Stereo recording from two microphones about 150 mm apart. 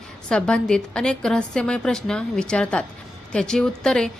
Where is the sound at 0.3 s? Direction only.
5° left (ahead or behind).